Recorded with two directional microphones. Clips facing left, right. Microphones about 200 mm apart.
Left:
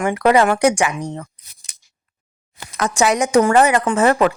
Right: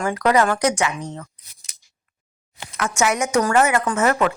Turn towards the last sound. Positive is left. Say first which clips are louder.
# left 4 dB
turn(degrees=30)  # may be behind; listen again after turning